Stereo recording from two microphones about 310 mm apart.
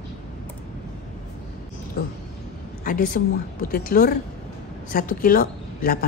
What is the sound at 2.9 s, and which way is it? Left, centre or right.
A woman's voice, left.